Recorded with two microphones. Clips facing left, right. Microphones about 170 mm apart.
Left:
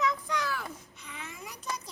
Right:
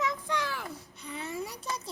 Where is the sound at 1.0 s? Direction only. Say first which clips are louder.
Right 8 dB; 35° right (ahead or behind).